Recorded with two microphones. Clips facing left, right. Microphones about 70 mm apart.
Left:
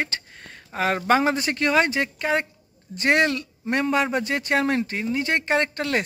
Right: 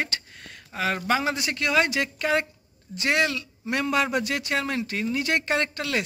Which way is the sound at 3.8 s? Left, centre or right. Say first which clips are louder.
Left 1 dB; left.